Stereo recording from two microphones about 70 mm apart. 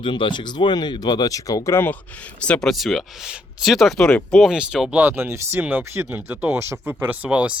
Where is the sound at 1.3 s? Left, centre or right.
Left.